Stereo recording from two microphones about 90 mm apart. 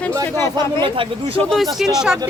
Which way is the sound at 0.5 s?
70° right (ahead or behind).